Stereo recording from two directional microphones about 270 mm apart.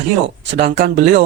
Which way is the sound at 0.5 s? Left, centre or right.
Right.